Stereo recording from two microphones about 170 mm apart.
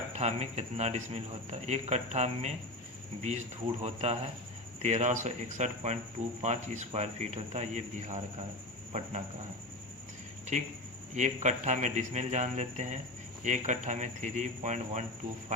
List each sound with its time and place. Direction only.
0.2 s a man's voice: 40° right (ahead or behind)
11.1 s speech: 45° right (ahead or behind)